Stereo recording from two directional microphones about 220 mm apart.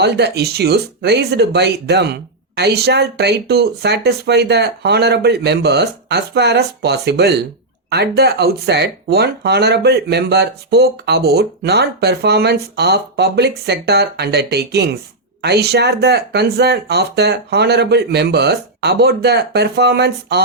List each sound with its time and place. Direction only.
0.0 s speech: 50° right (ahead or behind)